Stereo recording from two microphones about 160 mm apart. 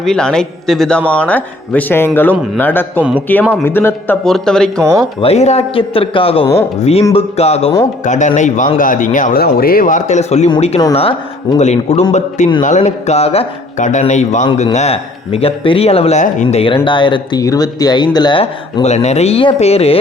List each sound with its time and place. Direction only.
0.0 s a man's voice: 5° left (ahead or behind)
3.0 s speech: 10° right (ahead or behind)
3.5 s a man's voice: 15° left (ahead or behind)
4.8 s speech: 15° right (ahead or behind)
5.2 s a man's voice: 40° left (ahead or behind)